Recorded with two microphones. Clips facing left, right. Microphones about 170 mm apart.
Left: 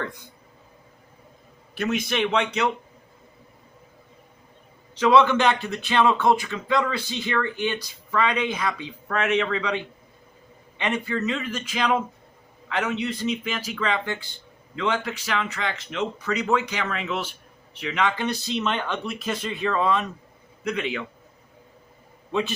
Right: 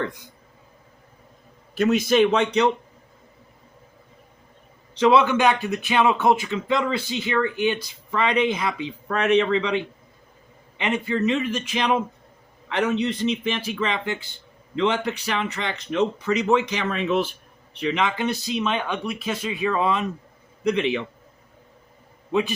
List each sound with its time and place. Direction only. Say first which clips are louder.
2.1 s a man's voice: right 6 dB; 35° right (ahead or behind)
4.9 s speech: right 1 dB; 30° right (ahead or behind)
5.2 s speech: right 1 dB; 15° right (ahead or behind)
8.1 s a man's voice: right 3 dB; 30° right (ahead or behind)
18.0 s speech: left 4 dB; 15° right (ahead or behind)
22.3 s a man's voice: right 3 dB; 15° right (ahead or behind)